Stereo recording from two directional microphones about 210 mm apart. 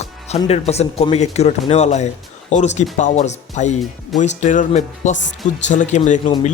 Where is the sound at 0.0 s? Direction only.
30° left (ahead or behind).